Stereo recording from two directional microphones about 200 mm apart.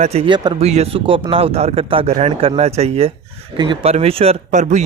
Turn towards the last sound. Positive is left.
turn(degrees=-35)  # may be behind; listen again after turning